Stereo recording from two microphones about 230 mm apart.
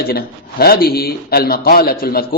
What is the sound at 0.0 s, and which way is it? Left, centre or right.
A man's voice, left.